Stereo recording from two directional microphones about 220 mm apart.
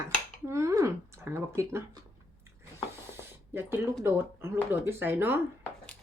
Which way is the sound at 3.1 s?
10° right (ahead or behind).